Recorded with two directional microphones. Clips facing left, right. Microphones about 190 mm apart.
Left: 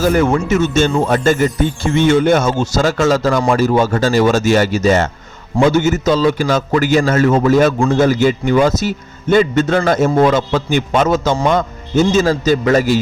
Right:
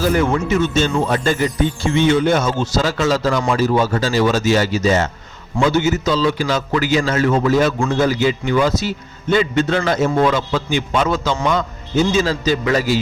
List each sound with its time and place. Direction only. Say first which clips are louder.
0.0 s a man's voice: left 3 dB; 45° left (ahead or behind)